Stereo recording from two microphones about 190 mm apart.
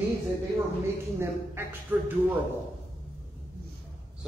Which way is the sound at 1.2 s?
15° right (ahead or behind).